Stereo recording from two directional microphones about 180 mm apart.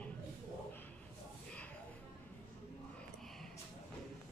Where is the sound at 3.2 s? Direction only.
Centre (ahead or behind).